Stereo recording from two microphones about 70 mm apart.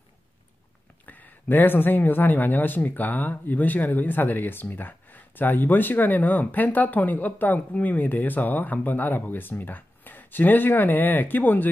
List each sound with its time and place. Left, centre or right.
1.0 s speech: left